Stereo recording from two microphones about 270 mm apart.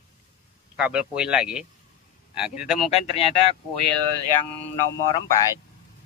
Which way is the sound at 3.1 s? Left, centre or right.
Left.